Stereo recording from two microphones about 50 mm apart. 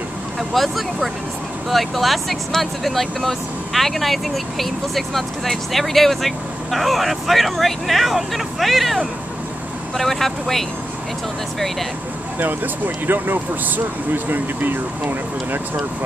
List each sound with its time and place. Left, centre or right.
0.4 s speech: centre
12.4 s speech: right